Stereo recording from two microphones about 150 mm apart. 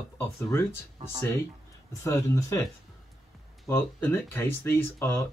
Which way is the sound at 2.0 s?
20° left (ahead or behind).